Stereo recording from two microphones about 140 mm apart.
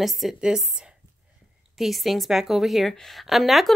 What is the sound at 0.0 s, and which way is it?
Speech, centre (ahead or behind).